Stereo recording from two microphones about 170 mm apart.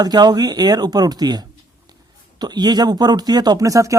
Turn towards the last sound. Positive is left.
turn(degrees=-20)  # may be behind; listen again after turning